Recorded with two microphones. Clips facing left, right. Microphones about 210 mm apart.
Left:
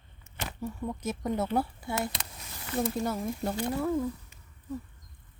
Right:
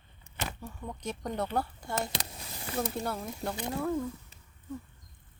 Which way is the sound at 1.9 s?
35° right (ahead or behind).